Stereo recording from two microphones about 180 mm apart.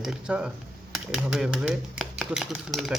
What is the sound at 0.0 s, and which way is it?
Speech, 5° right (ahead or behind).